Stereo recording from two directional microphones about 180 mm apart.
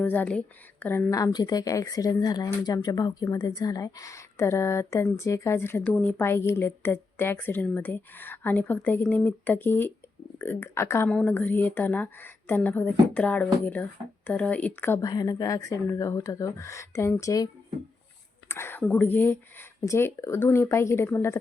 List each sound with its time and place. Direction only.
0.0 s a woman's voice: 10° left (ahead or behind)